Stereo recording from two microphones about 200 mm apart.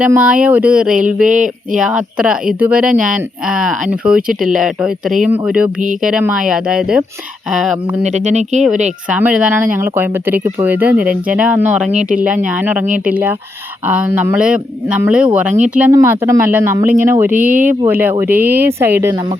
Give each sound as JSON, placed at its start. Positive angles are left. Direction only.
{"t": 0.0, "sound": "speech", "side_deg": -5}
{"t": 0.9, "sound": "speech", "side_deg": -40}
{"t": 1.7, "sound": "speech", "side_deg": -5}
{"t": 8.0, "sound": "speech", "side_deg": -35}
{"t": 9.0, "sound": "speech", "side_deg": -5}